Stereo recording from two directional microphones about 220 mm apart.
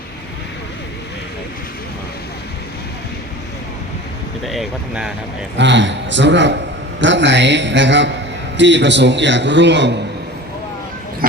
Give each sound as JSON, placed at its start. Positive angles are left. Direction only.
{"t": 4.4, "sound": "speech", "side_deg": 0}
{"t": 5.5, "sound": "a man's voice", "side_deg": -55}